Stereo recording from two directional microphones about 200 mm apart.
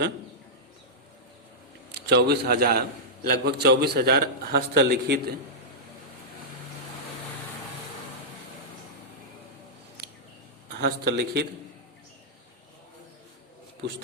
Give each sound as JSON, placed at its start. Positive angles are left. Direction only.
{"t": 1.9, "sound": "a man's voice", "side_deg": -55}
{"t": 10.8, "sound": "a man's voice", "side_deg": -55}